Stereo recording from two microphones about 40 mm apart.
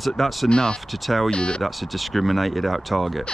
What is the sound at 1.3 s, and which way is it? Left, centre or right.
Speech, left.